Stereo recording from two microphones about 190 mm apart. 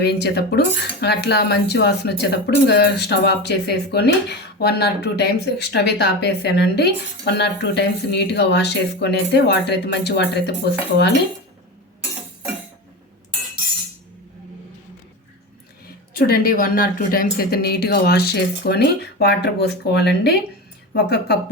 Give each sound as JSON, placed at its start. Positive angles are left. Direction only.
{"t": 0.0, "sound": "speech", "side_deg": 60}
{"t": 16.1, "sound": "speech", "side_deg": 50}